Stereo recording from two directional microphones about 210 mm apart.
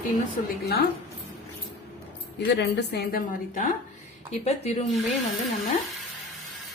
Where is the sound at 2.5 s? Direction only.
55° left (ahead or behind).